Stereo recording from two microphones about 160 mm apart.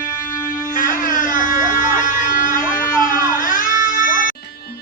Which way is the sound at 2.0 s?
60° left (ahead or behind).